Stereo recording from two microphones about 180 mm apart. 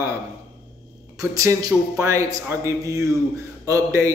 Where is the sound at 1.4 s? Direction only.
15° right (ahead or behind).